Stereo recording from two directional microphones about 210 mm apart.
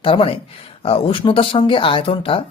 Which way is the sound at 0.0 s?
25° left (ahead or behind).